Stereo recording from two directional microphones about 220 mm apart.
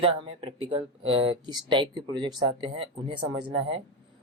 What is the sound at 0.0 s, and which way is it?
Speech, 25° right (ahead or behind).